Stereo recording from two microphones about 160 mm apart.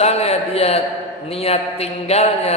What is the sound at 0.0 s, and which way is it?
A man's voice, 40° left (ahead or behind).